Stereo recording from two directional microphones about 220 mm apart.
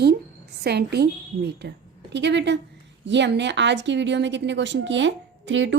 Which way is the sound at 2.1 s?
50° right (ahead or behind).